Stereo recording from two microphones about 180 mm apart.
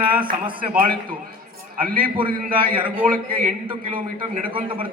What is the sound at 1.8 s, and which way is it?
Speech, 50° right (ahead or behind).